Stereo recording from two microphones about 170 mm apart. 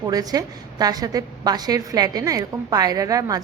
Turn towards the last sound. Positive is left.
turn(degrees=-20)  # may be behind; listen again after turning